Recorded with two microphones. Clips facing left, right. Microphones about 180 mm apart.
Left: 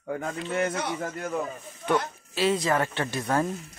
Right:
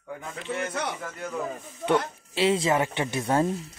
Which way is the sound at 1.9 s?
25° right (ahead or behind).